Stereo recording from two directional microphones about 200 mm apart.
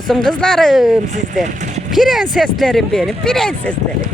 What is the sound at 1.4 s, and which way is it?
Vehicle, 35° right (ahead or behind).